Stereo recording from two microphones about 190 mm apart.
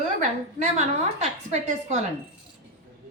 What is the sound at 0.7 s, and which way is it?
A woman's voice, 35° right (ahead or behind).